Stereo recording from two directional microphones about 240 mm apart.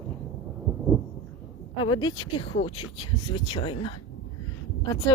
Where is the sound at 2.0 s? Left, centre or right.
Centre.